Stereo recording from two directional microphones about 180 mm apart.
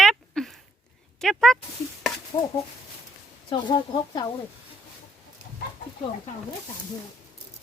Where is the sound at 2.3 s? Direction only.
20° left (ahead or behind).